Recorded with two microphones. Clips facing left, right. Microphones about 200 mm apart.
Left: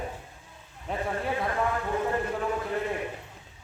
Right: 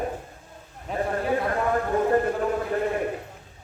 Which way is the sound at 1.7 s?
50° right (ahead or behind).